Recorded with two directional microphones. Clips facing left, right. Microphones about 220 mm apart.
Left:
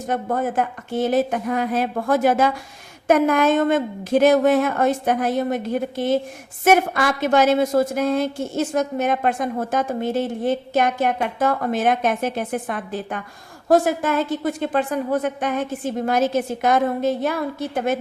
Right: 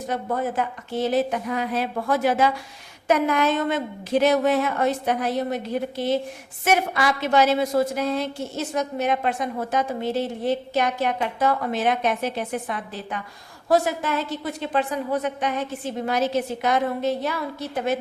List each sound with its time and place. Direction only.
0.1 s a woman's voice: 50° left (ahead or behind)